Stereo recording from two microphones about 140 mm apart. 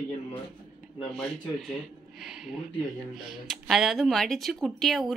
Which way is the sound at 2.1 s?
5° right (ahead or behind).